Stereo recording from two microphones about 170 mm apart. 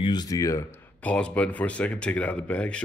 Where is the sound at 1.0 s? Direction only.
5° left (ahead or behind).